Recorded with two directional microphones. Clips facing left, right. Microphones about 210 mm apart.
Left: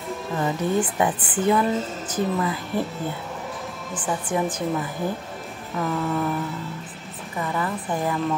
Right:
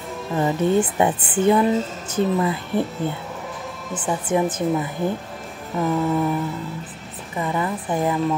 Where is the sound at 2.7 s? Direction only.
Centre (ahead or behind).